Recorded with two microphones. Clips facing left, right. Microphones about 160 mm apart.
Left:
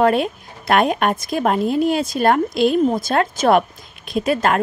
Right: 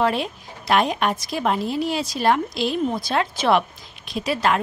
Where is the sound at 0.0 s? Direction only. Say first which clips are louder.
Left 6 dB; 50° left (ahead or behind).